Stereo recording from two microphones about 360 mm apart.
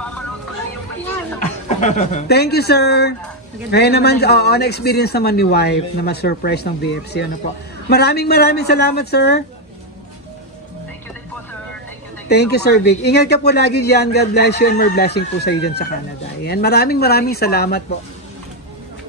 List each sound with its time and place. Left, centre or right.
1.7 s speech: centre
12.3 s speech: left